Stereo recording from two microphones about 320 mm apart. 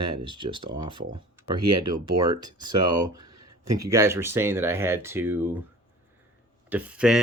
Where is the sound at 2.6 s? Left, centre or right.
Right.